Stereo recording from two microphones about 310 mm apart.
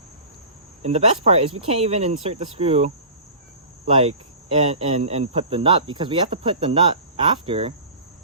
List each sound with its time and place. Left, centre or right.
0.8 s speech: right
3.8 s cricket: centre